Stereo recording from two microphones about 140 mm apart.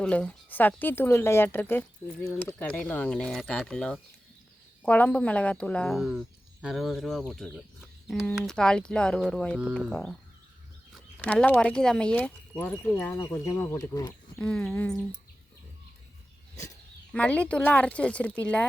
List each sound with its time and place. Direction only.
0.0 s speech: 10° left (ahead or behind)
11.2 s speech: 10° left (ahead or behind)
14.3 s speech: 5° left (ahead or behind)
17.1 s speech: 10° left (ahead or behind)